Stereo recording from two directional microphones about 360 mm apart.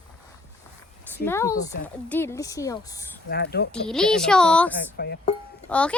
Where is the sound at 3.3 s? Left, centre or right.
Left.